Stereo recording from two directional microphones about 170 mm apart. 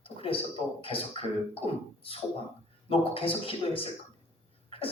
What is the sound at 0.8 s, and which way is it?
Speech, 35° left (ahead or behind).